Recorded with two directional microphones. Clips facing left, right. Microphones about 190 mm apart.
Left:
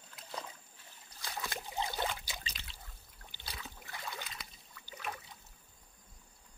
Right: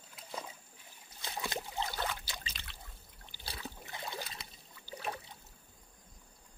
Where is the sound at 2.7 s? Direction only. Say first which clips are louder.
Right 2 dB; 60° right (ahead or behind).